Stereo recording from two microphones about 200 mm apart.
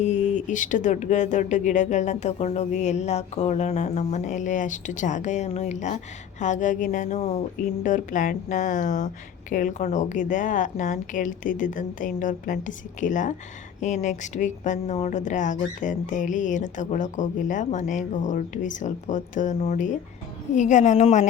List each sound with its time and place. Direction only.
0.0 s speech: 35° left (ahead or behind)